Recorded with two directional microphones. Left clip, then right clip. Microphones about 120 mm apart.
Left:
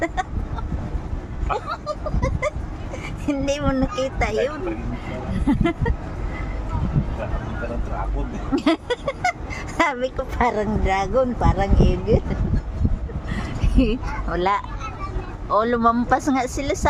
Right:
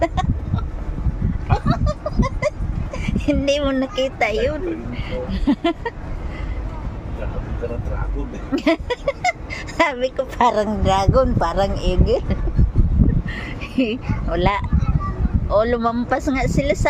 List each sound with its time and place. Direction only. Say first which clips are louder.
0.0 s vehicle: right 3 dB; centre (ahead or behind)
1.5 s goat: right 2 dB; 10° right (ahead or behind)
3.2 s speech: right 4 dB; 15° right (ahead or behind)
8.5 s speech: right 2 dB; 10° left (ahead or behind); by 12.4 s 20° right (ahead or behind)
13.3 s a sound: even; 5° left (ahead or behind)
15.4 s speech: even; 10° left (ahead or behind)